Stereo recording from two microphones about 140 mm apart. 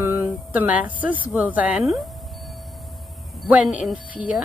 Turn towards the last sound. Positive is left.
turn(degrees=-10)  # may be behind; listen again after turning